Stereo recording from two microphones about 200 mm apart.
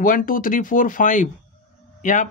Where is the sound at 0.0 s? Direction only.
45° left (ahead or behind).